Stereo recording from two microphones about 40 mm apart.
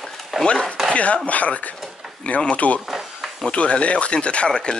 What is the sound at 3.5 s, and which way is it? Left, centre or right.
Speech, left.